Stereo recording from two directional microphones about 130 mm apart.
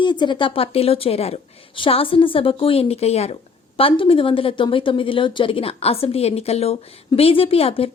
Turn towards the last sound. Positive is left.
turn(degrees=50)  # may be behind; listen again after turning